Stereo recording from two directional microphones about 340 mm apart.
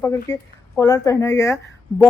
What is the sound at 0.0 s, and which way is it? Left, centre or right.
Speech, centre.